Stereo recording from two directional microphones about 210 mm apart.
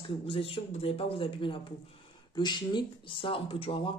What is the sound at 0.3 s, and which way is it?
Speech, 25° left (ahead or behind).